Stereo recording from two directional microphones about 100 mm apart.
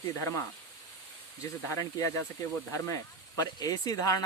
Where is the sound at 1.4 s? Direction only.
30° left (ahead or behind).